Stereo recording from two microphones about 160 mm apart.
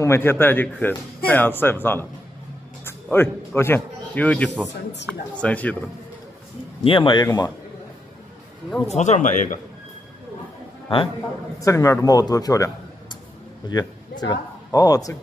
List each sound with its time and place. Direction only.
0.0 s a man's voice: 15° left (ahead or behind)
6.8 s speech: 35° left (ahead or behind)
8.8 s speech: 45° left (ahead or behind)
10.9 s speech: 35° left (ahead or behind)
11.6 s a man's voice: 20° left (ahead or behind)